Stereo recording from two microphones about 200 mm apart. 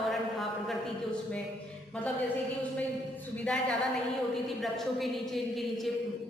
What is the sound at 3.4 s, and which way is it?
A woman's voice, 5° left (ahead or behind).